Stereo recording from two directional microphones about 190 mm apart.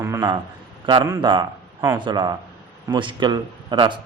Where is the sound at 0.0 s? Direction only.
15° right (ahead or behind).